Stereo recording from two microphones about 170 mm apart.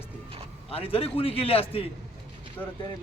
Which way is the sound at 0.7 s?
35° left (ahead or behind).